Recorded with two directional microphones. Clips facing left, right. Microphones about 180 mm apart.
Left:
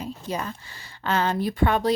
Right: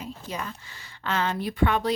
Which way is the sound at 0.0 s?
35° left (ahead or behind).